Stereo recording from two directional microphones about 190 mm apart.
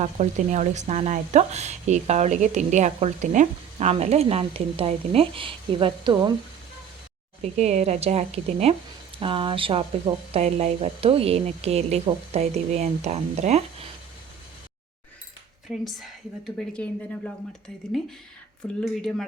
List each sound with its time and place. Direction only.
0.0 s speech: 40° right (ahead or behind)
7.4 s speech: 35° right (ahead or behind)
15.7 s a woman's voice: centre (ahead or behind)
18.8 s a woman's voice: centre (ahead or behind)